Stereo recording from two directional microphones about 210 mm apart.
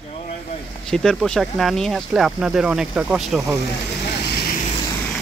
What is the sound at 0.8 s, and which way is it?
Speech, 5° left (ahead or behind).